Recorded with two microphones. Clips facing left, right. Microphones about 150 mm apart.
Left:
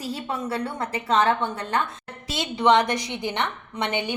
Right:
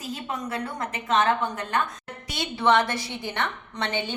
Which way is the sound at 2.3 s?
20° left (ahead or behind).